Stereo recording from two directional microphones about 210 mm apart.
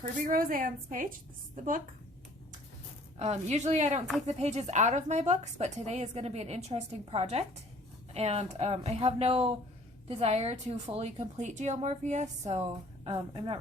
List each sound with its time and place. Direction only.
0.0 s a woman's voice: 40° right (ahead or behind)
3.2 s a woman's voice: 30° right (ahead or behind)